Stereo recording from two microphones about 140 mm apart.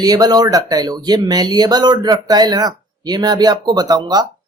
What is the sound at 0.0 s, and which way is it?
Speech, 30° right (ahead or behind).